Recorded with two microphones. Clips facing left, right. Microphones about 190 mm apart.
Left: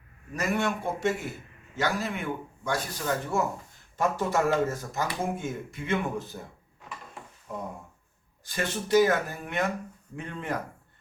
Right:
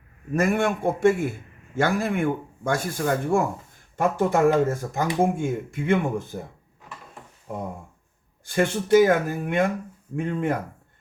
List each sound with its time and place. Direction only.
0.3 s speech: 50° right (ahead or behind)
8.4 s speech: 55° right (ahead or behind)